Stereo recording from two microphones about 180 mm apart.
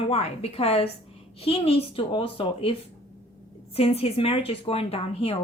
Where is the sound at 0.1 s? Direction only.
35° left (ahead or behind).